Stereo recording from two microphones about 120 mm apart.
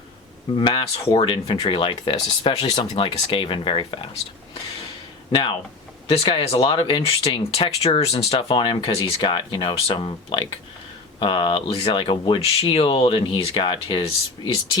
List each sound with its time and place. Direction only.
0.6 s speech: 45° left (ahead or behind)
2.7 s speech: 40° left (ahead or behind)
6.1 s speech: 45° left (ahead or behind)